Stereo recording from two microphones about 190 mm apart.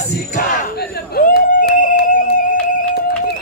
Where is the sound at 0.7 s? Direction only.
55° left (ahead or behind).